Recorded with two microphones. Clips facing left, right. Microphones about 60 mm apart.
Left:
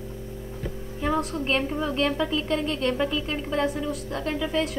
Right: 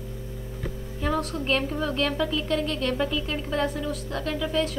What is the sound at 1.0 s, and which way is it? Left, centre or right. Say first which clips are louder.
A woman's voice: left 1 dB; centre.